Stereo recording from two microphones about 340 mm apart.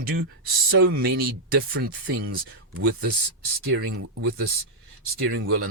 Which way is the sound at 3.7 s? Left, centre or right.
Right.